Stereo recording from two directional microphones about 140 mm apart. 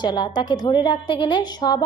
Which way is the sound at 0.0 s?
30° left (ahead or behind).